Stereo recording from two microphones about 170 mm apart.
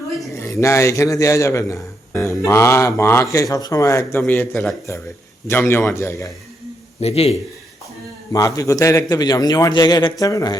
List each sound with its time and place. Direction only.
0.3 s a man's voice: 15° left (ahead or behind)
7.0 s a man's voice: 35° left (ahead or behind)
8.3 s a man's voice: 20° left (ahead or behind)